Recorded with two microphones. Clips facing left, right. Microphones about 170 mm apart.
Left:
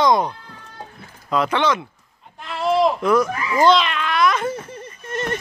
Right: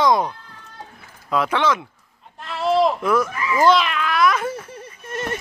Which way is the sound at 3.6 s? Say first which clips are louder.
Left 1 dB; 5° right (ahead or behind).